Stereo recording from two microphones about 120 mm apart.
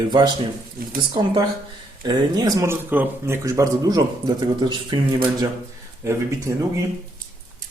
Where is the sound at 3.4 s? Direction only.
30° right (ahead or behind).